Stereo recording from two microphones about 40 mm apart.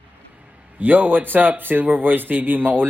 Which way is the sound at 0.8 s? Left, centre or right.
Right.